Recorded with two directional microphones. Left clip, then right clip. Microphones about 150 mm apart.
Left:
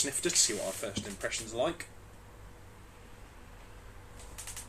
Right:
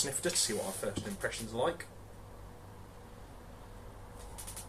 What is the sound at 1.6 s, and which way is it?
Speech, 20° left (ahead or behind).